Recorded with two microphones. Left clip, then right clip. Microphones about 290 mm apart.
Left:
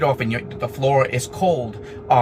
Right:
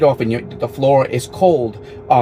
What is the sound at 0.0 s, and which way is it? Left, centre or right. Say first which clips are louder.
Speech: right 6 dB; left.